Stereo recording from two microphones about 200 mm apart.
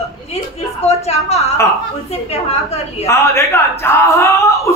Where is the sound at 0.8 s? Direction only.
30° left (ahead or behind).